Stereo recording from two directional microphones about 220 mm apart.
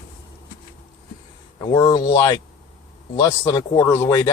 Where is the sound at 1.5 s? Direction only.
20° left (ahead or behind).